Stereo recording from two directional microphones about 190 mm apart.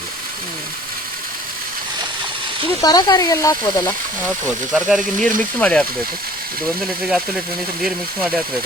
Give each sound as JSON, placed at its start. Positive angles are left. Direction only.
{"t": 2.8, "sound": "speech", "side_deg": 20}
{"t": 4.7, "sound": "speech", "side_deg": 0}